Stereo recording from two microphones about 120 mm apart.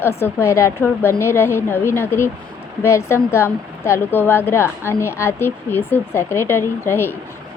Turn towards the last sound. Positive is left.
turn(degrees=20)  # may be behind; listen again after turning